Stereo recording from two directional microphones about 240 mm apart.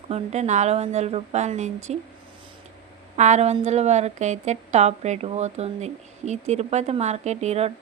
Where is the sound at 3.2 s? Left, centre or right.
Right.